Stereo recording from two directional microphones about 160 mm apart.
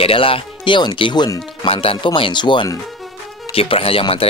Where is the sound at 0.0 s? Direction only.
35° left (ahead or behind).